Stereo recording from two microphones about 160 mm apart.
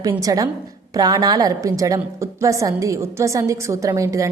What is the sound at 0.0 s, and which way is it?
A woman's voice, 20° right (ahead or behind).